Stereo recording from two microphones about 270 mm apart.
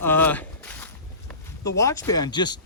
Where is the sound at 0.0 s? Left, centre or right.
Centre.